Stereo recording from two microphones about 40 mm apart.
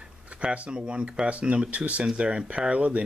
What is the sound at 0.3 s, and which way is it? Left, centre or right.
Speech, right.